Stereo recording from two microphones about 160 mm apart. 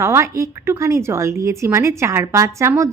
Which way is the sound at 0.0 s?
15° right (ahead or behind).